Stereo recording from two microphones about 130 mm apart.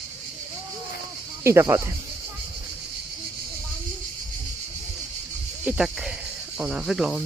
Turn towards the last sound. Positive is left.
turn(degrees=0)  # may be behind; listen again after turning